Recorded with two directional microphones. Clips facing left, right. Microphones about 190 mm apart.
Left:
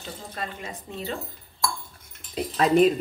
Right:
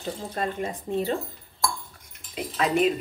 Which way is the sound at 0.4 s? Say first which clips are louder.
Right 6 dB; 50° right (ahead or behind).